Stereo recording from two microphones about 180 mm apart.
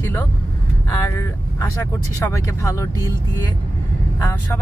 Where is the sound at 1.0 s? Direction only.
15° left (ahead or behind).